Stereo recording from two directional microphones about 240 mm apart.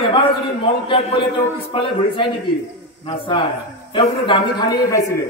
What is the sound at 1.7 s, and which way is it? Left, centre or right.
A man's voice, left.